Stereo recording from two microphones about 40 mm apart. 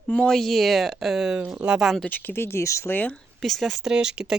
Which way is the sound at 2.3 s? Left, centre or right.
Left.